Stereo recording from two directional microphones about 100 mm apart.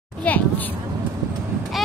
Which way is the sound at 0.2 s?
15° left (ahead or behind).